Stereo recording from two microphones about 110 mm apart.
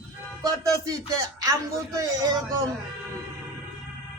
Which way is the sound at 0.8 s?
30° right (ahead or behind).